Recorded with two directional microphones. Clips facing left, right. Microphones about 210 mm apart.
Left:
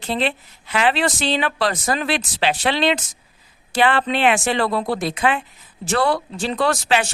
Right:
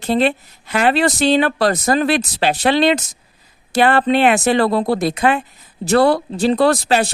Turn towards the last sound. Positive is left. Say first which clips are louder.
# right 5 dB
turn(degrees=-35)  # may be behind; listen again after turning